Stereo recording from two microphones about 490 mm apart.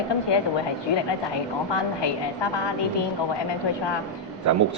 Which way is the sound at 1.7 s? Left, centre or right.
Left.